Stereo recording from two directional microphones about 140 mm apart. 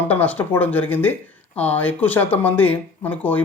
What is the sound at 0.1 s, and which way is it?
Speech, 10° left (ahead or behind).